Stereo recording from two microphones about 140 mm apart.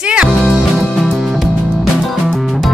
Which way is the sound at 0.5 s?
Centre (ahead or behind).